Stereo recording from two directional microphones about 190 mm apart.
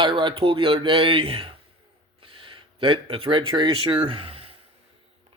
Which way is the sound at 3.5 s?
25° right (ahead or behind).